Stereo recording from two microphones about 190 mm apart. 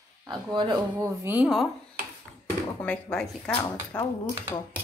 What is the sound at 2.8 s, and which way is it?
Speech, 5° left (ahead or behind).